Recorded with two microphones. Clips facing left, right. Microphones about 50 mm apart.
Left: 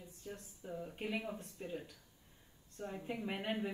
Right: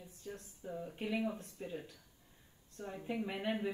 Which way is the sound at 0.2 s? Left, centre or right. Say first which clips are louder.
Right 1 dB; left.